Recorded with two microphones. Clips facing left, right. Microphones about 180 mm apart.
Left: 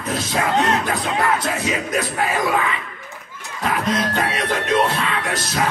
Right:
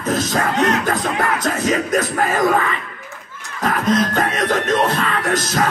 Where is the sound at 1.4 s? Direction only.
45° right (ahead or behind).